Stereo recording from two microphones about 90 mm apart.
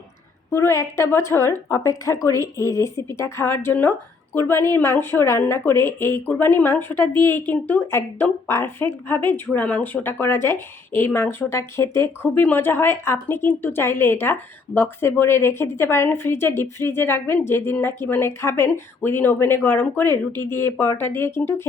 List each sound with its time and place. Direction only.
0.5 s a woman's voice: 30° left (ahead or behind)